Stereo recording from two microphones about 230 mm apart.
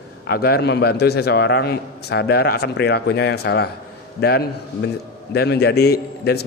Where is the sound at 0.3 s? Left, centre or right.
Left.